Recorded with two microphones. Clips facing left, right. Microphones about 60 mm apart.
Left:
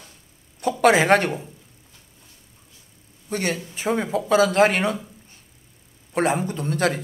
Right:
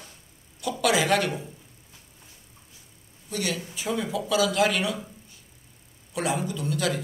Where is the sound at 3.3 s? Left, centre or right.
Left.